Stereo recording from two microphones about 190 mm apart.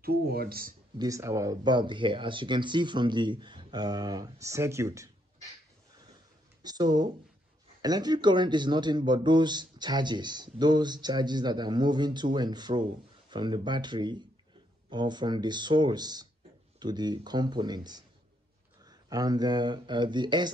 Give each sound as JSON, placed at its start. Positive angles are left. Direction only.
{"t": 0.0, "sound": "speech", "side_deg": -55}
{"t": 0.9, "sound": "speech", "side_deg": -15}
{"t": 6.6, "sound": "speech", "side_deg": -20}